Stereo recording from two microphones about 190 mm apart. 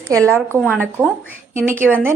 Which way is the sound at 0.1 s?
15° right (ahead or behind).